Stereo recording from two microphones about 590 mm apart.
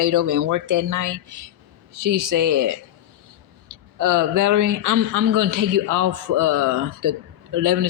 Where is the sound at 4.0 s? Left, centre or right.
Right.